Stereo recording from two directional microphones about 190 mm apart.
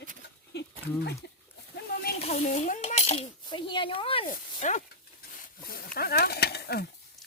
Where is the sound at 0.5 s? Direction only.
60° left (ahead or behind).